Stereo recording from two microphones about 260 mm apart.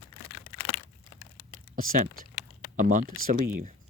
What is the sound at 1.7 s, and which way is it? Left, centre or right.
Speech, right.